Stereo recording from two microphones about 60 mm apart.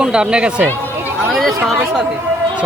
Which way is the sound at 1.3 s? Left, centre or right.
Centre.